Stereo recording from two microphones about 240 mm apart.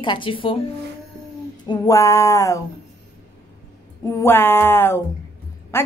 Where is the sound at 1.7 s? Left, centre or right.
Centre.